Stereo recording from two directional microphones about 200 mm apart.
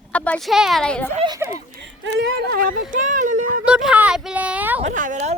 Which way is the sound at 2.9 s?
40° right (ahead or behind).